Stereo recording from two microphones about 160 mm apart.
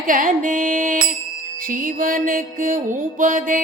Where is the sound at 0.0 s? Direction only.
55° right (ahead or behind).